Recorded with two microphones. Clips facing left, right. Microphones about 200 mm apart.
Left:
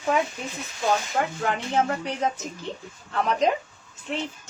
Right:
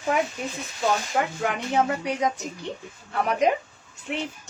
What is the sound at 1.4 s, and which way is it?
Speech, 10° right (ahead or behind).